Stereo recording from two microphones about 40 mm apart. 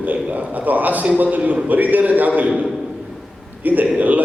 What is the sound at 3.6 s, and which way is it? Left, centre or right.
Speech, right.